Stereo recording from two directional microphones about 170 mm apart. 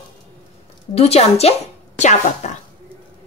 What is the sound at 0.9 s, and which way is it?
A woman's voice, 40° left (ahead or behind).